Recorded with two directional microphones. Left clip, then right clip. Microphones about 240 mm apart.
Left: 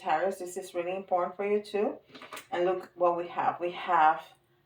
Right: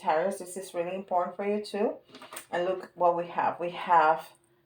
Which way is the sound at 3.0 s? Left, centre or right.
Right.